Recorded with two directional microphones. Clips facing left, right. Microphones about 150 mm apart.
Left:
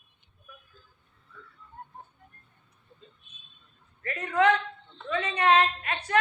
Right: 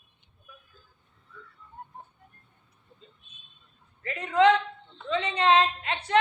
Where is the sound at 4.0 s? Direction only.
20° right (ahead or behind).